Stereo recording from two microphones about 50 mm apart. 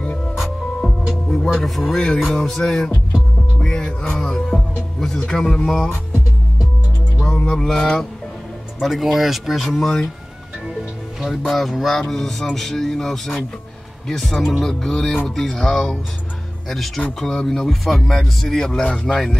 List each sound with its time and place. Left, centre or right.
0.7 s music: centre
1.6 s speech: centre
4.5 s music: centre
5.1 s speech: centre
7.2 s speech: centre
8.8 s speech: centre
11.5 s speech: centre
18.7 s speech: left